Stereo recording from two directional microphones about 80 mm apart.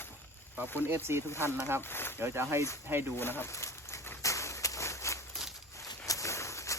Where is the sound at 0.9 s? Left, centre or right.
Right.